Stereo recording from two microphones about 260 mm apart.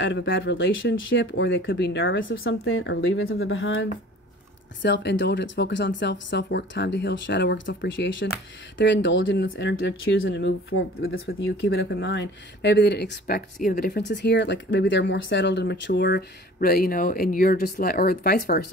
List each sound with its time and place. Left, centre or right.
0.0 s speech: left